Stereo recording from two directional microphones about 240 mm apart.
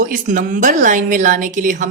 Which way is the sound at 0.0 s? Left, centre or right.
Right.